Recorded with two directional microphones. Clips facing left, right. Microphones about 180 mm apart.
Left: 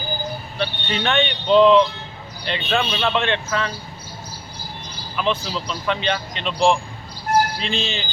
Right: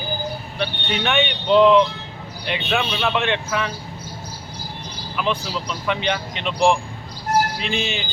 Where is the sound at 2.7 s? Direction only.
5° right (ahead or behind).